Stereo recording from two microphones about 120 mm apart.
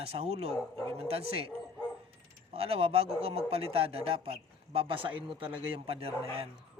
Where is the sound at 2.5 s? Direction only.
55° right (ahead or behind).